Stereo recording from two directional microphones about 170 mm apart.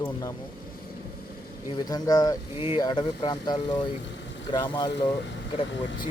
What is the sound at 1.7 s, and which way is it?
Speech, 20° left (ahead or behind).